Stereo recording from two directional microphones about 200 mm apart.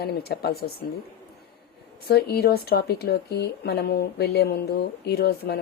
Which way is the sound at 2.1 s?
50° left (ahead or behind).